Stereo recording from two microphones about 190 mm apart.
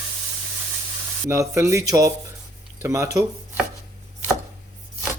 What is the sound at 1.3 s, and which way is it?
Speech, 15° right (ahead or behind).